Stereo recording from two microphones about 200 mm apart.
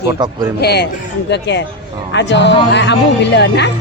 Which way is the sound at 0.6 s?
55° left (ahead or behind).